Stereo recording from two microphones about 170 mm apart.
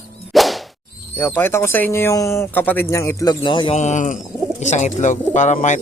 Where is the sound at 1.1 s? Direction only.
10° left (ahead or behind); by 3.8 s 30° left (ahead or behind).